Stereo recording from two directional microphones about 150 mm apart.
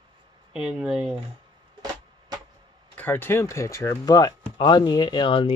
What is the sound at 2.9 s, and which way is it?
Speech, 10° left (ahead or behind).